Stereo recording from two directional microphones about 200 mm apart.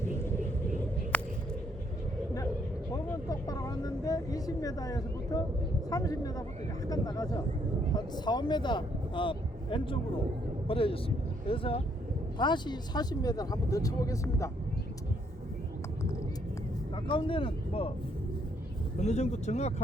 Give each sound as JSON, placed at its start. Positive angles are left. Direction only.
{"t": 0.0, "sound": "vehicle", "side_deg": 10}
{"t": 1.1, "sound": "a sound", "side_deg": 5}
{"t": 2.9, "sound": "vehicle", "side_deg": 15}
{"t": 5.9, "sound": "speech", "side_deg": 15}
{"t": 16.9, "sound": "speech", "side_deg": 25}
{"t": 18.9, "sound": "speech", "side_deg": 35}